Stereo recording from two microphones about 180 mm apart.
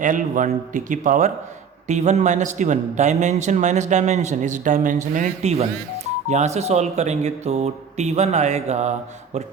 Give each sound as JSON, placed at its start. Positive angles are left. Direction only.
{"t": 0.0, "sound": "a man's voice", "side_deg": -45}